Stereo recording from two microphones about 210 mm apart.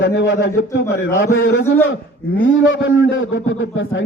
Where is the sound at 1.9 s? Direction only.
65° left (ahead or behind).